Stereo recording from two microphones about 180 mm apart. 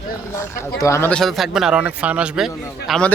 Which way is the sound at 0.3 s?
15° left (ahead or behind).